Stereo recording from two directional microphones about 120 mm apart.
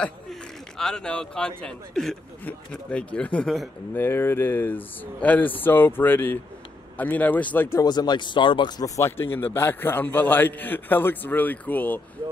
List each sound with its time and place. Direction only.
0.0 s a sound: 5° left (ahead or behind)
1.6 s a man's voice: 5° left (ahead or behind)
7.8 s a man's voice: 35° left (ahead or behind); by 12.0 s 15° left (ahead or behind)